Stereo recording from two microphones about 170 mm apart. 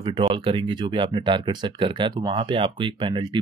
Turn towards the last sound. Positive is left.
turn(degrees=-25)  # may be behind; listen again after turning